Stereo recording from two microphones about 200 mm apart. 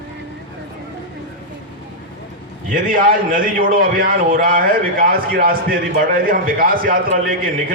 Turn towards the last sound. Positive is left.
turn(degrees=-45)  # may be behind; listen again after turning